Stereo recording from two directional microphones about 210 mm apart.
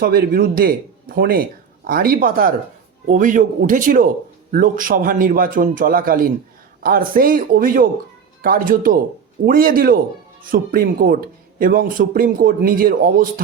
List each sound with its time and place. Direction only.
0.0 s a man's voice: 45° right (ahead or behind)